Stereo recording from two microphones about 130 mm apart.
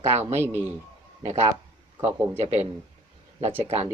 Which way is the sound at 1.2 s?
60° right (ahead or behind).